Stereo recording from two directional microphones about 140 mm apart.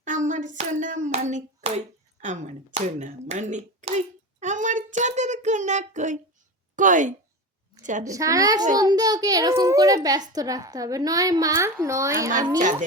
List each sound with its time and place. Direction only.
0.0 s hands: 65° right (ahead or behind)
6.7 s a woman's voice: 65° right (ahead or behind)
7.8 s a sound: 65° right (ahead or behind)
8.0 s a child's voice: 25° right (ahead or behind)